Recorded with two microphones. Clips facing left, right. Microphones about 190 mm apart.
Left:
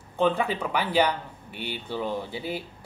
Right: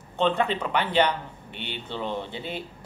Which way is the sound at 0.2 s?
5° left (ahead or behind).